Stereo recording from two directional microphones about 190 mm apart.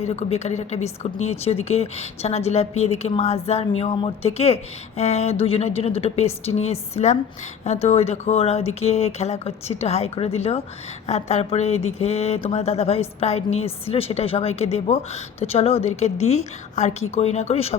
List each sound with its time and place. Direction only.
0.0 s speech: 35° left (ahead or behind)